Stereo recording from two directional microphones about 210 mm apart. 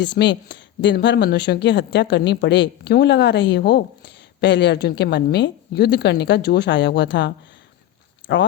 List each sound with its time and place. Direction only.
0.0 s speech: 55° left (ahead or behind)